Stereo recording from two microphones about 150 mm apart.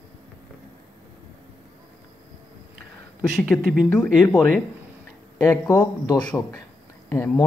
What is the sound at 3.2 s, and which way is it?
Speech, centre (ahead or behind).